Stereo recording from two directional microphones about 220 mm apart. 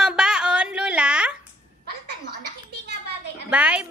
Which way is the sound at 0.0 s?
5° right (ahead or behind).